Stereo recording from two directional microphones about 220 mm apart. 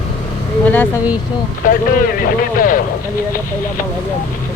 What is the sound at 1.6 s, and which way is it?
Speech, 40° left (ahead or behind).